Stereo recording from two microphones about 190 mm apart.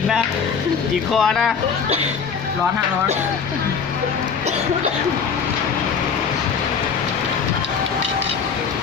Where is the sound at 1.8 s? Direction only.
35° right (ahead or behind).